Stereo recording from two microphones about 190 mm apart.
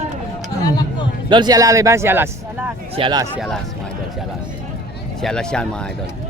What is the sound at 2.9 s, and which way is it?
Speech, 25° right (ahead or behind).